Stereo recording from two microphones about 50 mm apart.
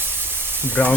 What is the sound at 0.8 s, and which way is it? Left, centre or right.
Speech, left.